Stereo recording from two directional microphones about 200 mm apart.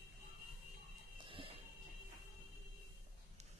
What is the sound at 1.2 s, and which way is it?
Music, 25° right (ahead or behind).